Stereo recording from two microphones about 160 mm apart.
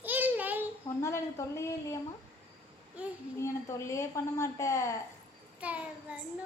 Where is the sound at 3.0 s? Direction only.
10° right (ahead or behind).